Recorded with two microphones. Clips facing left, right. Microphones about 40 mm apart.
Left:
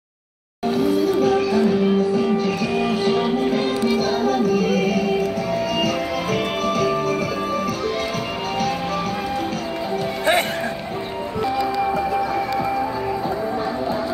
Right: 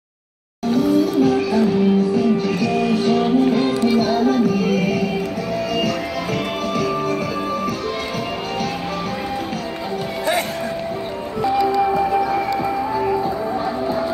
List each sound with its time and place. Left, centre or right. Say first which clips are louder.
0.7 s music: right 2 dB; centre
6.7 s music: even; centre
11.8 s music: right 3 dB; centre